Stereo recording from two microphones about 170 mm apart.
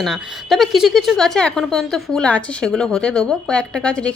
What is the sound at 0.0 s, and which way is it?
Speech, centre (ahead or behind).